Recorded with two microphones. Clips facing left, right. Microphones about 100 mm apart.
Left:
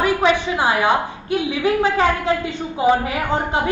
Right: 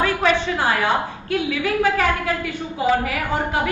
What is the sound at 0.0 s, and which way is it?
A woman's voice, 15° left (ahead or behind).